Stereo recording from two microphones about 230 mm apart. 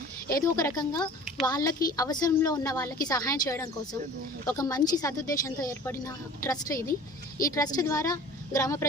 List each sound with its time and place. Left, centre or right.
0.3 s a woman's voice: centre